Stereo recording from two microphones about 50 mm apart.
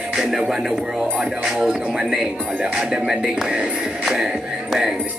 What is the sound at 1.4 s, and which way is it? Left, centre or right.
Speech, centre.